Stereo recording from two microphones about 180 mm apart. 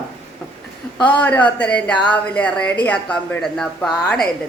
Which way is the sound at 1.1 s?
10° left (ahead or behind).